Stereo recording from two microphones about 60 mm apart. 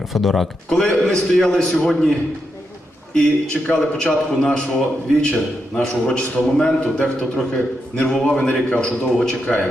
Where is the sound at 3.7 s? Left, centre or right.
Centre.